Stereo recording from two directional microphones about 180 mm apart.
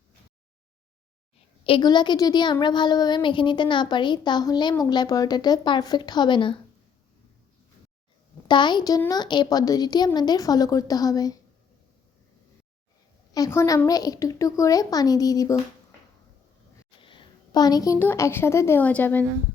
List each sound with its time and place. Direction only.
1.6 s a woman's voice: 25° left (ahead or behind)
8.4 s a woman's voice: 25° left (ahead or behind)
13.3 s a woman's voice: 15° left (ahead or behind)
17.0 s a woman's voice: 25° left (ahead or behind); by 19.2 s 10° left (ahead or behind)